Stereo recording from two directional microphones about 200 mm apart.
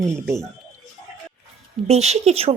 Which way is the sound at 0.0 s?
15° right (ahead or behind).